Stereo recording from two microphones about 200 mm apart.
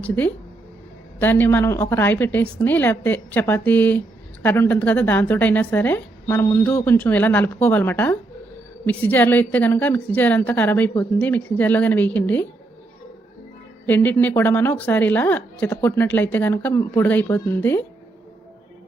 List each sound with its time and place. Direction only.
0.0 s a woman's voice: 5° left (ahead or behind)
13.8 s a woman's voice: 10° left (ahead or behind)